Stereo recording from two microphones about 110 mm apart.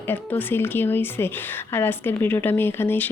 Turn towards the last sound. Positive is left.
turn(degrees=20)  # may be behind; listen again after turning